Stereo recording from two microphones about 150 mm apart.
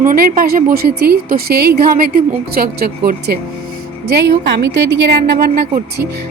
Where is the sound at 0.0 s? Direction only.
70° right (ahead or behind).